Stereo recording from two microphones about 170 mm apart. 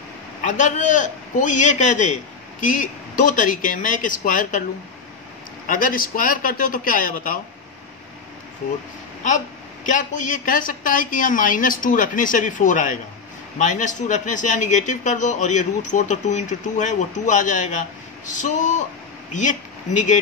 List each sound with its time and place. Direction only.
0.4 s a man's voice: 45° left (ahead or behind)
5.7 s a man's voice: 55° left (ahead or behind)
9.2 s a man's voice: 45° left (ahead or behind)